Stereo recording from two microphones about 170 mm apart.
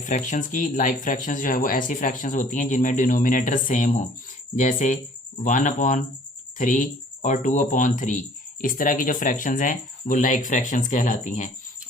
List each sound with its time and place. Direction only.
0.0 s speech: 50° left (ahead or behind)